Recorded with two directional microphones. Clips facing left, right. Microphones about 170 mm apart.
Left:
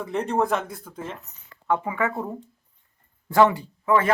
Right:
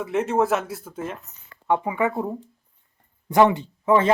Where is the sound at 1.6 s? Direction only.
15° right (ahead or behind).